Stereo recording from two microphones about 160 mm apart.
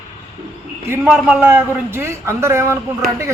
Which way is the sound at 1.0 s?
5° right (ahead or behind).